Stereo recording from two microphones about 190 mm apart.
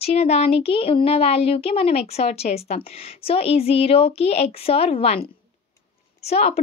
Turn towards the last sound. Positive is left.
turn(degrees=35)  # may be behind; listen again after turning